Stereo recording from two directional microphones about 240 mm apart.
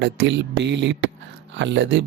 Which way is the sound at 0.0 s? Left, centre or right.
Right.